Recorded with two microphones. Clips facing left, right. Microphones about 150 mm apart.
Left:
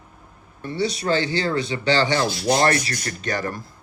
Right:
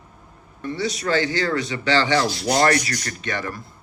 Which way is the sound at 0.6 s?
30° left (ahead or behind).